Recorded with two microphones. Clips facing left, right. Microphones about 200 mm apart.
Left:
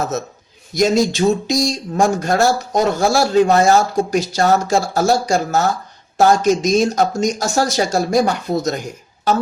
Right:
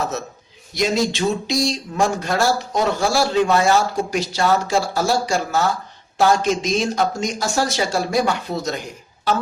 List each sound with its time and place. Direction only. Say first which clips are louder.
0.7 s speech: left 5 dB; 45° left (ahead or behind)